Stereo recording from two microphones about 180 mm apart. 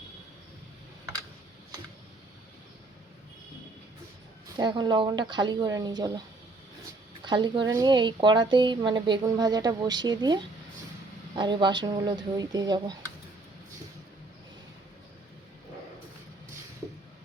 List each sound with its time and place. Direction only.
4.4 s speech: 25° right (ahead or behind)
7.3 s speech: 25° right (ahead or behind)